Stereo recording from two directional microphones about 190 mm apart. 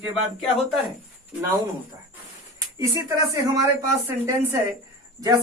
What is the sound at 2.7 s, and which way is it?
Speech, 15° right (ahead or behind).